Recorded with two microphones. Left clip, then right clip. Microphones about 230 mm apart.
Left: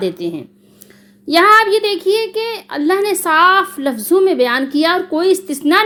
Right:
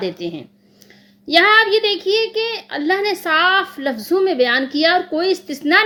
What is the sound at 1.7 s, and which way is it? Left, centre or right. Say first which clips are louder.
Speech: left 2 dB; centre.